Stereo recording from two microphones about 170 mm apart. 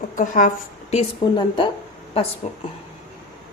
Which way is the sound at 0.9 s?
35° left (ahead or behind).